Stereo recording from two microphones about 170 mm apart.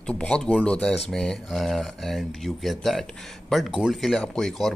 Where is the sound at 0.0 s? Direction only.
5° left (ahead or behind).